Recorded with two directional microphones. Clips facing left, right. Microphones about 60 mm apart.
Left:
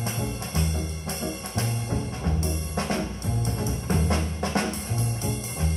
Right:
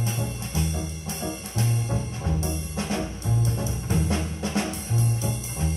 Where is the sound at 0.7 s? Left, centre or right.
Left.